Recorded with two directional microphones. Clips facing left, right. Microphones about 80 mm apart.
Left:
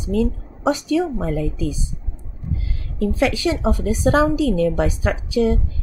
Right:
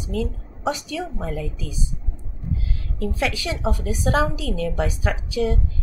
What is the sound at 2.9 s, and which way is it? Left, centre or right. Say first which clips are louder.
A woman's voice: left 6 dB; left.